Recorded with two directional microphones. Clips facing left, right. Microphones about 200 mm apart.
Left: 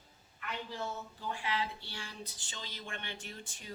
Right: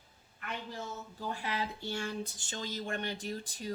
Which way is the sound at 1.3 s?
40° right (ahead or behind).